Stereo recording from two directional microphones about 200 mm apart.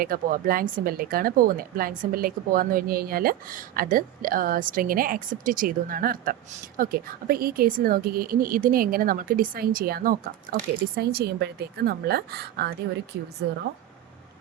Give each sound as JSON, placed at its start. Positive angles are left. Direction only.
{"t": 0.0, "sound": "speech", "side_deg": -45}